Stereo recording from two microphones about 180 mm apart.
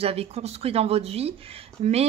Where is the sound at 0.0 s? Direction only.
35° right (ahead or behind).